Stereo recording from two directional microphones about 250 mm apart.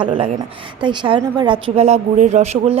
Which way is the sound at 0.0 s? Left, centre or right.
Right.